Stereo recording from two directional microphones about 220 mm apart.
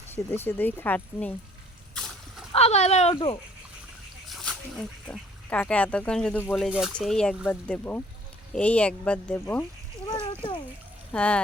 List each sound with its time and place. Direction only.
0.1 s speech: 10° left (ahead or behind)
2.5 s speech: 30° left (ahead or behind)
4.4 s speech: 5° left (ahead or behind)
11.1 s speech: 5° left (ahead or behind)